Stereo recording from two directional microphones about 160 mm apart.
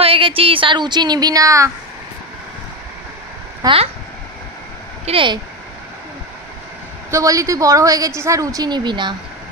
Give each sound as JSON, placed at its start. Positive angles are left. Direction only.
{"t": 0.0, "sound": "a woman's voice", "side_deg": -35}
{"t": 3.6, "sound": "speech", "side_deg": -35}
{"t": 5.0, "sound": "speech", "side_deg": -35}
{"t": 7.1, "sound": "a woman's voice", "side_deg": -20}